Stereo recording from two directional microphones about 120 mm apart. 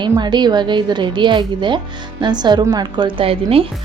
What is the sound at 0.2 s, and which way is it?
A woman's voice, 35° right (ahead or behind).